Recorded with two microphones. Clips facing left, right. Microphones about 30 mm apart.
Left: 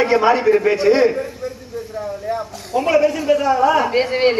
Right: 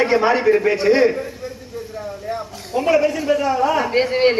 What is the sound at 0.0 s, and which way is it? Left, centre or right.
A man's voice, centre.